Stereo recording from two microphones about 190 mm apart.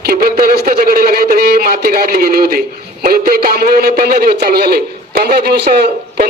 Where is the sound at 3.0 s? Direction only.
50° right (ahead or behind).